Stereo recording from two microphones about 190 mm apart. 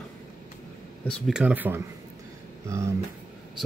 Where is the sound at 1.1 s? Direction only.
5° left (ahead or behind); by 2.9 s 15° right (ahead or behind).